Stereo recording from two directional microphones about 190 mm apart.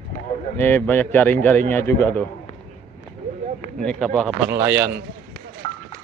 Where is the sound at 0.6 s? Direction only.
10° left (ahead or behind).